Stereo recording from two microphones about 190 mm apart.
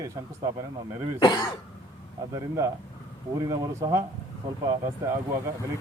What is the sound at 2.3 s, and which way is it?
A man's voice, 15° right (ahead or behind).